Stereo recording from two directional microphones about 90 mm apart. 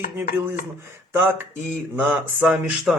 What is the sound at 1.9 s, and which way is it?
Speech, 15° right (ahead or behind).